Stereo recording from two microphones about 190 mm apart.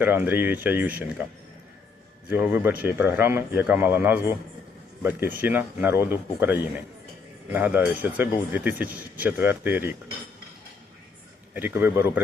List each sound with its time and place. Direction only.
0.0 s speech: 10° right (ahead or behind)
2.3 s speech: 10° right (ahead or behind)
11.5 s speech: 10° right (ahead or behind)